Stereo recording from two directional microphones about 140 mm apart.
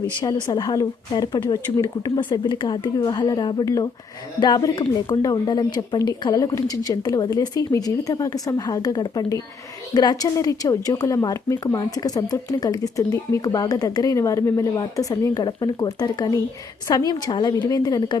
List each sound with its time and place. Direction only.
0.2 s a woman's voice: 30° left (ahead or behind)